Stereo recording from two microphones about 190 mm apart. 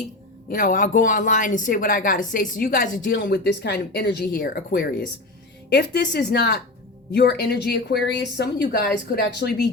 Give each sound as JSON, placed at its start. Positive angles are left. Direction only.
{"t": 0.4, "sound": "a woman's voice", "side_deg": 45}
{"t": 5.7, "sound": "speech", "side_deg": 60}